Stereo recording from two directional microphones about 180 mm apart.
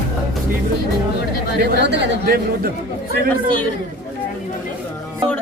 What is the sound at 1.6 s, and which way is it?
Speech, 65° right (ahead or behind).